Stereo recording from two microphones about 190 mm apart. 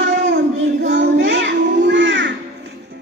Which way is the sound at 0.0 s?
65° right (ahead or behind).